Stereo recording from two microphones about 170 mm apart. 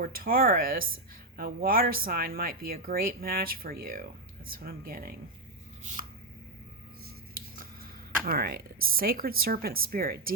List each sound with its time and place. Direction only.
0.0 s speech: 60° right (ahead or behind)
5.8 s chopping: 45° right (ahead or behind)
7.5 s a sound: 55° right (ahead or behind)
8.3 s speech: 60° right (ahead or behind)